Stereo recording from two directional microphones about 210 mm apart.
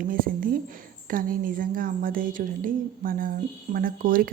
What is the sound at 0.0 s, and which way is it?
A woman's voice, 40° right (ahead or behind).